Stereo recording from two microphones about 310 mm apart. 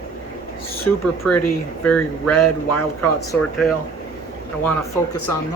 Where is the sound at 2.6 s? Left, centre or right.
Left.